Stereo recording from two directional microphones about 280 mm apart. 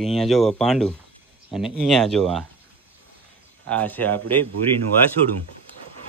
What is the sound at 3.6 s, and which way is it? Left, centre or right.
Speech, centre.